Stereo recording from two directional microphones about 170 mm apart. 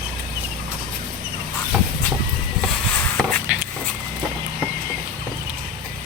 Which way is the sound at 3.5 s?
5° right (ahead or behind).